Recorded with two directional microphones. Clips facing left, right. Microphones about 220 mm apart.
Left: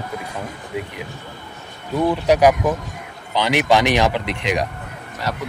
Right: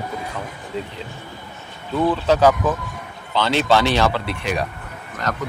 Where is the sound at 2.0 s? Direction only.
15° left (ahead or behind).